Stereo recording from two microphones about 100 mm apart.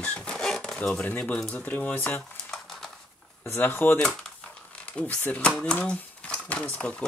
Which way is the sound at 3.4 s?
20° left (ahead or behind).